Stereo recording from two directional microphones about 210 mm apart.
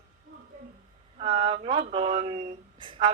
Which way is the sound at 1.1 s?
25° right (ahead or behind).